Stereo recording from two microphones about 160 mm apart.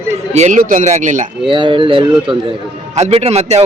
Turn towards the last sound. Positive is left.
turn(degrees=-40)  # may be behind; listen again after turning